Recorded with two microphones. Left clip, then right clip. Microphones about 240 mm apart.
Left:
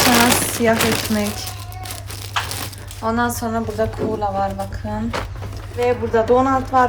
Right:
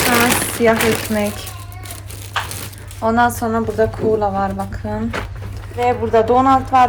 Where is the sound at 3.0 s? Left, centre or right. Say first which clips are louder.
Right 5 dB; centre.